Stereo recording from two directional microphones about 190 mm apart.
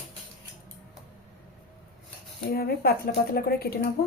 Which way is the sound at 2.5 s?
55° left (ahead or behind).